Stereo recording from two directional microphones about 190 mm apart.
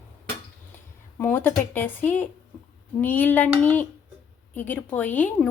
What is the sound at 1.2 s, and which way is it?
Speech, 10° left (ahead or behind).